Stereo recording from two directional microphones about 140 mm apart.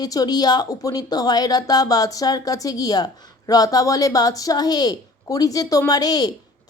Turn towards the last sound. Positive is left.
turn(degrees=25)  # may be behind; listen again after turning